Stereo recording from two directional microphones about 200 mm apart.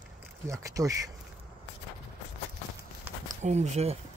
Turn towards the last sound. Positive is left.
turn(degrees=-30)  # may be behind; listen again after turning